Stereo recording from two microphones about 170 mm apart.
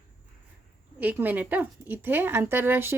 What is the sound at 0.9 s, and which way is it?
Speech, 10° right (ahead or behind).